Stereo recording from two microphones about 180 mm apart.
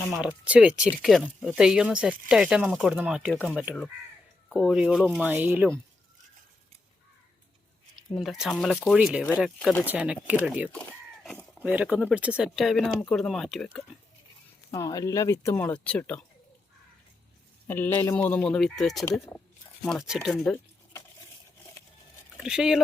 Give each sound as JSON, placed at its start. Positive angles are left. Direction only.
{"t": 0.1, "sound": "speech", "side_deg": -5}
{"t": 8.1, "sound": "speech", "side_deg": 0}
{"t": 9.9, "sound": "speech", "side_deg": -5}
{"t": 10.7, "sound": "a sound", "side_deg": 5}
{"t": 11.6, "sound": "speech", "side_deg": -10}
{"t": 14.7, "sound": "speech", "side_deg": 20}
{"t": 17.7, "sound": "speech", "side_deg": 10}
{"t": 22.4, "sound": "speech", "side_deg": -5}